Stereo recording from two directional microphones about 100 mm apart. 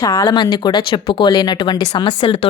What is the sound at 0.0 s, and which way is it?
Speech, 35° left (ahead or behind).